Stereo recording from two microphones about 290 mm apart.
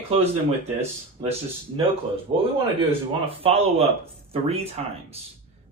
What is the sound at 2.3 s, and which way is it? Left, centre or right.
Speech, centre.